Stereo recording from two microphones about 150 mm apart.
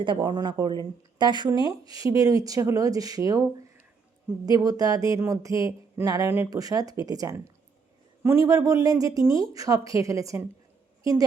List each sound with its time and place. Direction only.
0.0 s a woman's voice: 30° right (ahead or behind)